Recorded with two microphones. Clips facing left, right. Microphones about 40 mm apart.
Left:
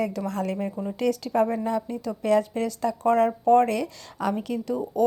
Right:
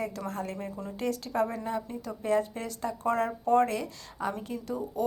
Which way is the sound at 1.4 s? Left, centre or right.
Left.